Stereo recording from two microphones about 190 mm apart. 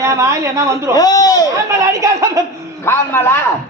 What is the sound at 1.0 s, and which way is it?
Speech, 20° left (ahead or behind).